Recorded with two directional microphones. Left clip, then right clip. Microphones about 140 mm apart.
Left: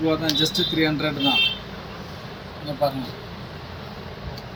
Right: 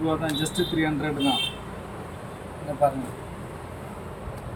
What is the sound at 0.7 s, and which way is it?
Speech, 5° right (ahead or behind).